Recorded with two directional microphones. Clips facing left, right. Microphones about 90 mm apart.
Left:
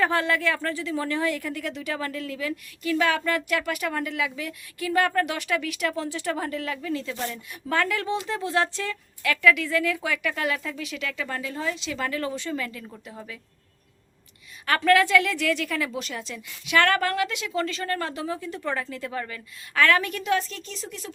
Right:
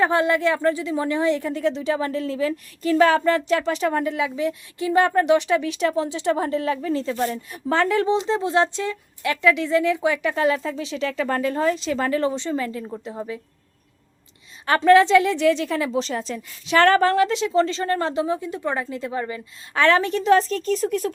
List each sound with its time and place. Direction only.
0.0 s a woman's voice: 20° right (ahead or behind)
14.7 s a woman's voice: 25° right (ahead or behind); by 21.1 s 50° right (ahead or behind)